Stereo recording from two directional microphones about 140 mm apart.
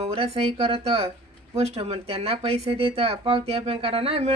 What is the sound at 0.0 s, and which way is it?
Speech, 45° right (ahead or behind).